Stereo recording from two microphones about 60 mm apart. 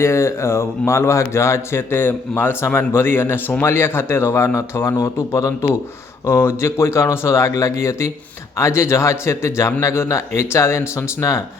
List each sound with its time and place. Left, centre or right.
0.0 s speech: left
1.9 s speech: left
4.9 s a man's voice: left
6.2 s speech: left